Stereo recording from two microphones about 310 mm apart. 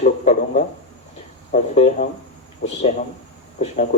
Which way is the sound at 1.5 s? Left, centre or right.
Left.